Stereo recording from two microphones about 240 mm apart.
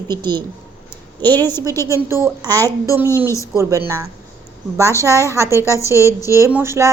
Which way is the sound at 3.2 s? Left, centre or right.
Centre.